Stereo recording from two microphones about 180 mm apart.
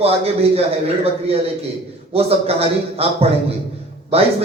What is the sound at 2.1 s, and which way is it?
Speech, 35° right (ahead or behind).